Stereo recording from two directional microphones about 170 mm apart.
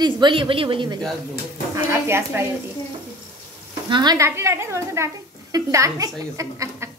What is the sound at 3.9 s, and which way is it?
A woman's voice, 25° right (ahead or behind).